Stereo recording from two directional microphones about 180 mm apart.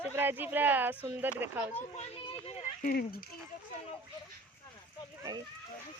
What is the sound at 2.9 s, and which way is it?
Speech, 55° left (ahead or behind).